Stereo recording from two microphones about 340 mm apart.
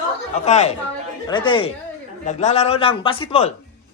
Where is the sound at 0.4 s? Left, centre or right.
Centre.